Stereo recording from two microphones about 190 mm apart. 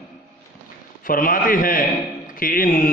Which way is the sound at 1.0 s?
45° left (ahead or behind).